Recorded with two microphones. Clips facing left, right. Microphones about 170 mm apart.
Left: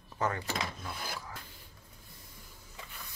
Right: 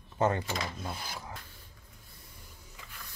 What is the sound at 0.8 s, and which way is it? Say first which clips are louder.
Filing: right 1 dB; 25° right (ahead or behind).